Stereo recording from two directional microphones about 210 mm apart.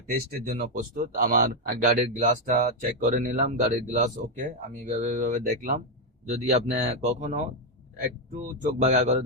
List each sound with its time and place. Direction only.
0.1 s speech: 40° right (ahead or behind)